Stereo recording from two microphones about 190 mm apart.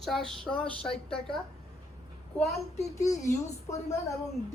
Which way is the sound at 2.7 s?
35° left (ahead or behind).